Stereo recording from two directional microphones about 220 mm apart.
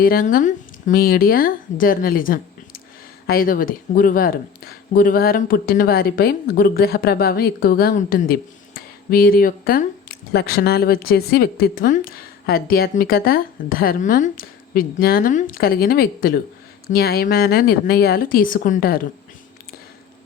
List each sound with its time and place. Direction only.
0.0 s speech: 40° left (ahead or behind)